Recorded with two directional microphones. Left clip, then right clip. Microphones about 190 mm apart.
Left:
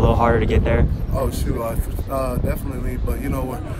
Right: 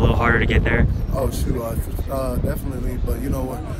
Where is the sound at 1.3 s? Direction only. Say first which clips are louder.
Left 1 dB; centre (ahead or behind).